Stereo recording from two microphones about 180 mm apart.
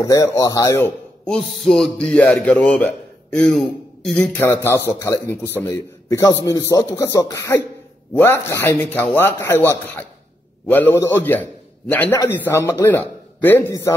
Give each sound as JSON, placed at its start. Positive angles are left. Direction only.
{"t": 0.0, "sound": "a man's voice", "side_deg": 15}